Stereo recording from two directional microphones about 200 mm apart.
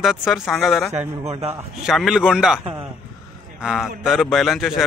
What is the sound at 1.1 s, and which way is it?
Speech, 30° right (ahead or behind).